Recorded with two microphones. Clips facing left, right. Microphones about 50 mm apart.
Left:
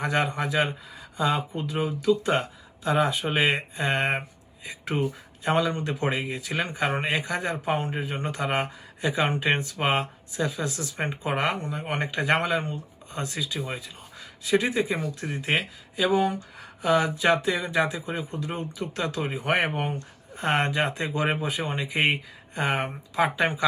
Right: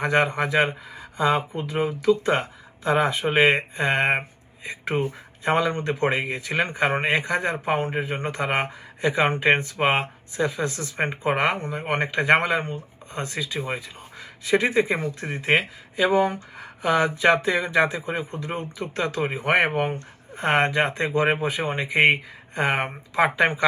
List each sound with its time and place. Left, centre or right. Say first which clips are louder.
0.0 s speech: right 4 dB; right